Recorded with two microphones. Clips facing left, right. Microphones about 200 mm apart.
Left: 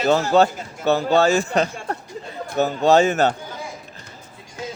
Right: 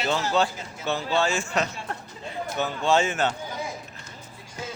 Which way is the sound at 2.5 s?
40° left (ahead or behind).